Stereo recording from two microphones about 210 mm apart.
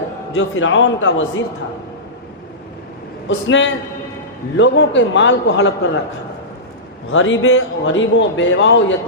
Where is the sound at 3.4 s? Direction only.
65° left (ahead or behind).